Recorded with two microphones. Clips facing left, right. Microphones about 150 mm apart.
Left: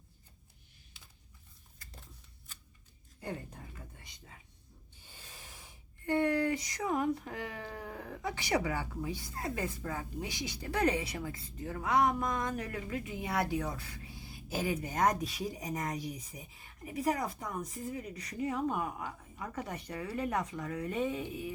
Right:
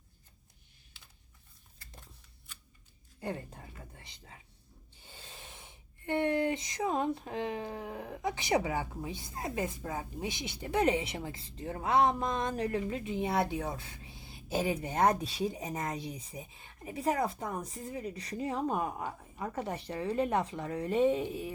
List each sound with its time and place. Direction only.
5.0 s speech: 25° right (ahead or behind)